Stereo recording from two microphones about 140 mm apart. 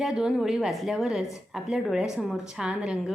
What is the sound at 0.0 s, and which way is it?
A woman's voice, 5° right (ahead or behind).